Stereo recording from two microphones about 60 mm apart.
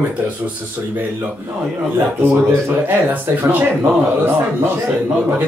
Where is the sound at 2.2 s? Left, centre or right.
Right.